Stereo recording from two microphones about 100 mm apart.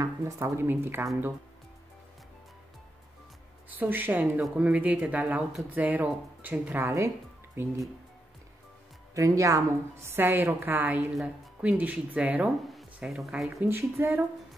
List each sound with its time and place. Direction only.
0.0 s a woman's voice: 25° right (ahead or behind)
3.7 s a woman's voice: 20° right (ahead or behind)
6.8 s a woman's voice: 30° right (ahead or behind)
9.1 s a woman's voice: 30° right (ahead or behind); by 12.4 s 15° right (ahead or behind)
12.7 s a sound: centre (ahead or behind)
13.6 s a woman's voice: 25° right (ahead or behind)